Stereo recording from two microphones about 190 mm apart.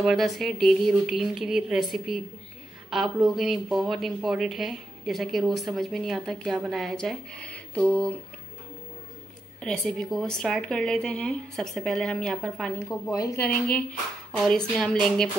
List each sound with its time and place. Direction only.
0.0 s speech: centre (ahead or behind)
9.6 s speech: 5° left (ahead or behind)
12.8 s a woman's voice: 15° left (ahead or behind)